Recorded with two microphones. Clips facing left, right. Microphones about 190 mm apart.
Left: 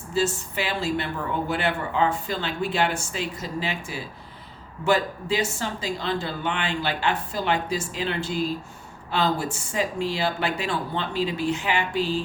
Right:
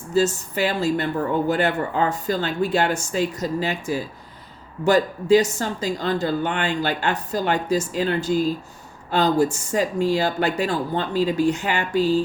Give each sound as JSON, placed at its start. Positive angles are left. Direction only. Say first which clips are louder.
{"t": 0.1, "sound": "speech", "louder": "right 5 dB", "side_deg": -40}